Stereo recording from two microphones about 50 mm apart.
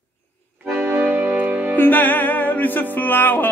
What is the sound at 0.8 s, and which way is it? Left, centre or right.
Music, right.